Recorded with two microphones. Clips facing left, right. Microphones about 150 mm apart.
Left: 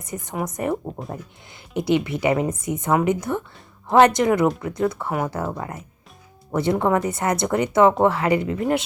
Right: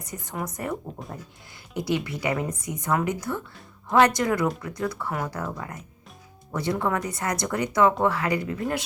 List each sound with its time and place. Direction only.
0.0 s speech: 20° left (ahead or behind)